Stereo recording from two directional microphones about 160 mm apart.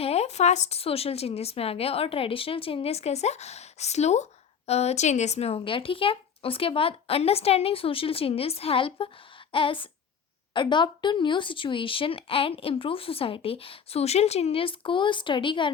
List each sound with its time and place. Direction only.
0.0 s a woman's voice: 40° left (ahead or behind)